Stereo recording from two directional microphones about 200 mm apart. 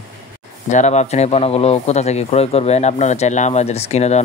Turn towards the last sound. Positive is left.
turn(degrees=35)  # may be behind; listen again after turning